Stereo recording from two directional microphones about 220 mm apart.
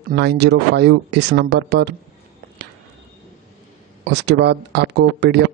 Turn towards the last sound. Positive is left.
turn(degrees=-50)  # may be behind; listen again after turning